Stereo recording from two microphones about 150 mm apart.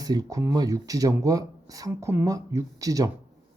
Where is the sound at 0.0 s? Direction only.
25° right (ahead or behind).